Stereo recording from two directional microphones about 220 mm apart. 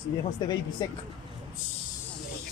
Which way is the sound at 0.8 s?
15° left (ahead or behind).